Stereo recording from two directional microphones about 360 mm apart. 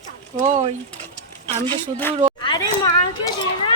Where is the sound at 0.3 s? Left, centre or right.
Centre.